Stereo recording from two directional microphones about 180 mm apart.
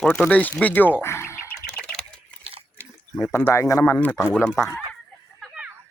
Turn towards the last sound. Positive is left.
turn(degrees=-5)  # may be behind; listen again after turning